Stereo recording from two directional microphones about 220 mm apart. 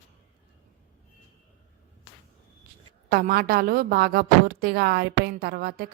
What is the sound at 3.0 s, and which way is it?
A woman's voice, 45° right (ahead or behind).